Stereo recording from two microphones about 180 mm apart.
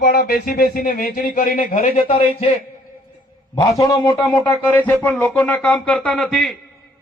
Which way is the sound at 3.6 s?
20° left (ahead or behind).